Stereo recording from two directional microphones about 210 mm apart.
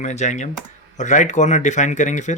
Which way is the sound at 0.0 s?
35° left (ahead or behind).